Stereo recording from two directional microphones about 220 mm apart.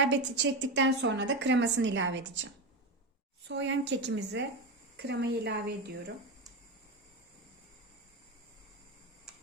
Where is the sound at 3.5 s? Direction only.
55° right (ahead or behind).